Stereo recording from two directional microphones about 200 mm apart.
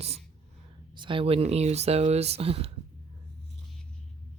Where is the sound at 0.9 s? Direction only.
25° right (ahead or behind).